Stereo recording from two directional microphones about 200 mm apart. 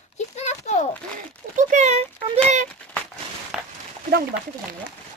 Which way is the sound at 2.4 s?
40° right (ahead or behind).